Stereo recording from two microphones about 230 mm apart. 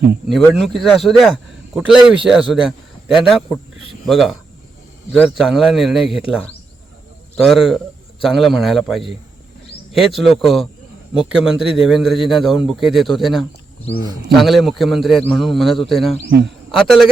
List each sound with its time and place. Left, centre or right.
0.3 s a man's voice: centre
7.3 s a man's voice: centre
16.1 s speech: right
16.7 s a man's voice: centre